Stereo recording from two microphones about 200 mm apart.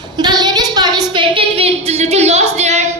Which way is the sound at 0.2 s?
20° right (ahead or behind).